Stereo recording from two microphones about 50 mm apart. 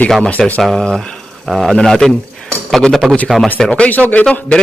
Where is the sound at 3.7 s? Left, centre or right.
Left.